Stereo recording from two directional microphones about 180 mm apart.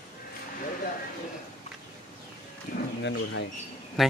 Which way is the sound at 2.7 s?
45° left (ahead or behind).